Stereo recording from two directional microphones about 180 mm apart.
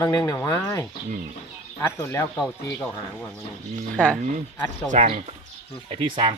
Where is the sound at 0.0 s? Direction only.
20° left (ahead or behind).